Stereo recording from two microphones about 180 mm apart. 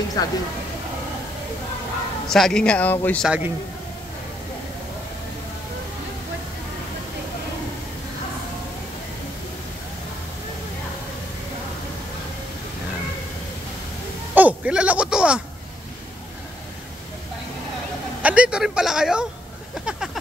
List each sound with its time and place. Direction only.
0.2 s speech: 20° left (ahead or behind)
2.2 s speech: centre (ahead or behind)
3.3 s a man's voice: 10° right (ahead or behind)
14.3 s bleat: 10° right (ahead or behind)
18.2 s a sound: 5° right (ahead or behind)